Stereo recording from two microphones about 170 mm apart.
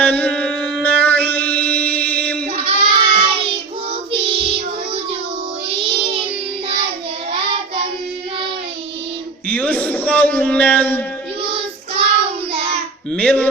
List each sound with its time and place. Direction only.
0.0 s music: 10° left (ahead or behind)
2.6 s child singing: 35° right (ahead or behind)
5.6 s music: 35° right (ahead or behind)
9.5 s a sound: 5° left (ahead or behind)
11.4 s child singing: 35° right (ahead or behind)
13.1 s a sound: 5° left (ahead or behind)